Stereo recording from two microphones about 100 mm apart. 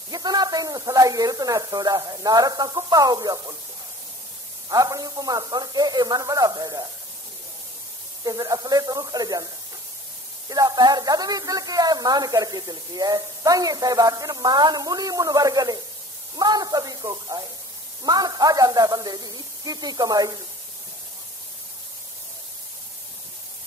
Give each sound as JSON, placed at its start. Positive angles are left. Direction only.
{"t": 0.1, "sound": "a woman's voice", "side_deg": -40}
{"t": 4.6, "sound": "a woman's voice", "side_deg": -35}
{"t": 8.2, "sound": "a woman's voice", "side_deg": -40}
{"t": 10.5, "sound": "a woman's voice", "side_deg": -40}